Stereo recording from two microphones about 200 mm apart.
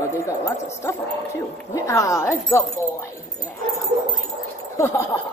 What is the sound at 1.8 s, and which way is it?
Speech, 15° left (ahead or behind).